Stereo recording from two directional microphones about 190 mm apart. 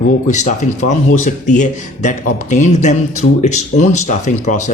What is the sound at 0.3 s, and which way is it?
Speech, 40° left (ahead or behind).